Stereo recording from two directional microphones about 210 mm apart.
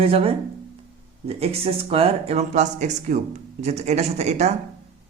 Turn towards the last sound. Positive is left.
turn(degrees=-30)  # may be behind; listen again after turning